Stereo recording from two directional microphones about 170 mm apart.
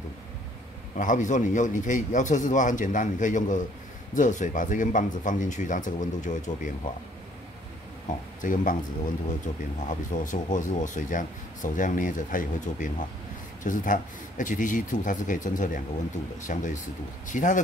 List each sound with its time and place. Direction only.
0.9 s speech: 50° left (ahead or behind)
8.4 s speech: 50° left (ahead or behind)
9.8 s speech: 50° left (ahead or behind)